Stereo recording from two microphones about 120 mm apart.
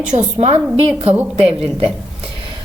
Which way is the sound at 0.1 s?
70° right (ahead or behind).